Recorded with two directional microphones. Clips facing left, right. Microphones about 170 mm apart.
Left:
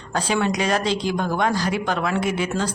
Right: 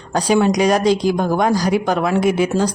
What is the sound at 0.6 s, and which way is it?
Speech, 15° right (ahead or behind).